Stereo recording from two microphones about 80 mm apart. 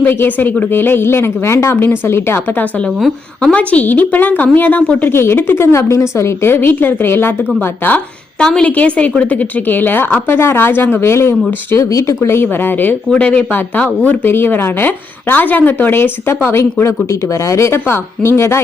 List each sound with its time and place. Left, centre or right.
0.0 s a woman's voice: left
8.4 s a woman's voice: centre
8.7 s a woman's voice: centre
13.1 s a woman's voice: centre; by 18.6 s left